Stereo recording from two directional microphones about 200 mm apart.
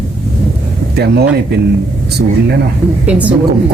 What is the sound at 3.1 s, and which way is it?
Speech, 5° right (ahead or behind).